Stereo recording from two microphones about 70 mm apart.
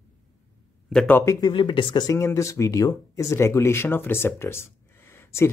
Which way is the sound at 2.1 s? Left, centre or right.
Left.